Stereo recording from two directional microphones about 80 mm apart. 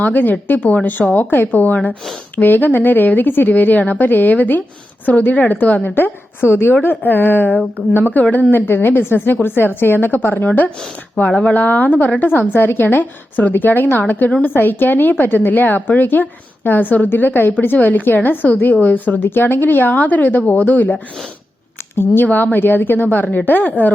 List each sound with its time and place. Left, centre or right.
0.0 s a woman's voice: left